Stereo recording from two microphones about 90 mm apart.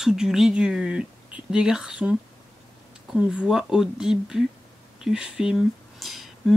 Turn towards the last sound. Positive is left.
turn(degrees=0)  # may be behind; listen again after turning